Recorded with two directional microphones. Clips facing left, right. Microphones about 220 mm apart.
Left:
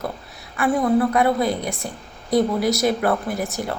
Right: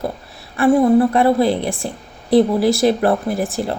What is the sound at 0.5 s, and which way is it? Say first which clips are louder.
A woman's voice: right 6 dB; 30° right (ahead or behind).